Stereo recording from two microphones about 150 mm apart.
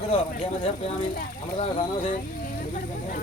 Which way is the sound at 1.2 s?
55° left (ahead or behind).